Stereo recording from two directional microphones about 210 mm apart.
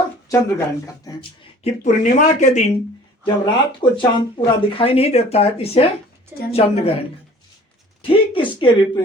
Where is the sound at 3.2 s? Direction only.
25° left (ahead or behind).